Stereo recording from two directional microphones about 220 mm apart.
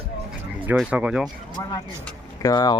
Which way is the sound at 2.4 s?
20° left (ahead or behind).